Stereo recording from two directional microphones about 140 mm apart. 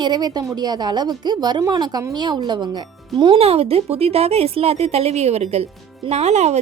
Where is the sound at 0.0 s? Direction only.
30° right (ahead or behind).